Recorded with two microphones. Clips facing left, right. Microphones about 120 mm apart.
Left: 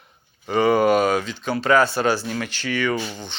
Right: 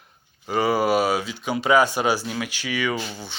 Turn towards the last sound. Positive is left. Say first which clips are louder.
# left 3 dB
turn(degrees=-10)  # may be behind; listen again after turning